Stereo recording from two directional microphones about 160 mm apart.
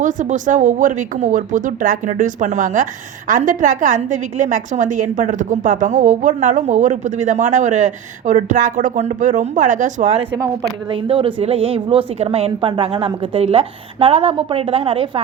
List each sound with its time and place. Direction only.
0.0 s a woman's voice: 55° right (ahead or behind)
10.9 s a woman's voice: 35° right (ahead or behind)